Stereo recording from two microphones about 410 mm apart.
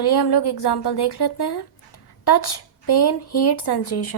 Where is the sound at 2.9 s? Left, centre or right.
Left.